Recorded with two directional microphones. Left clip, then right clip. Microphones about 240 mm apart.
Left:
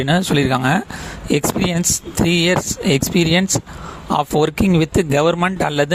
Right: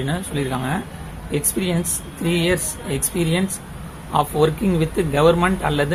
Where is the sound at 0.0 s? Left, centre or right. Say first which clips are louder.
Left 8 dB; left.